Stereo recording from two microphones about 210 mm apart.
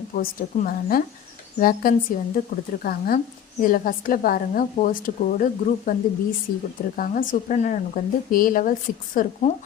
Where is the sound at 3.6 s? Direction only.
40° left (ahead or behind).